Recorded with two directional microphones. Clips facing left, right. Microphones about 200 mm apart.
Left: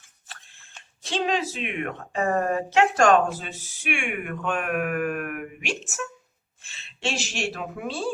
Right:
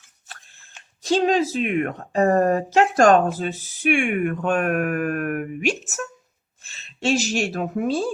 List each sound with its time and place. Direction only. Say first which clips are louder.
1.0 s a woman's voice: right 7 dB; 40° right (ahead or behind)